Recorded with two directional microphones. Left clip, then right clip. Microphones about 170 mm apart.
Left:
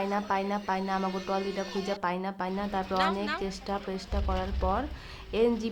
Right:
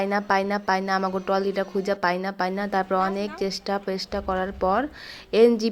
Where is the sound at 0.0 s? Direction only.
25° right (ahead or behind).